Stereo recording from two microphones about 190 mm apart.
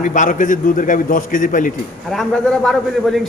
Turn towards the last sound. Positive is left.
turn(degrees=0)  # may be behind; listen again after turning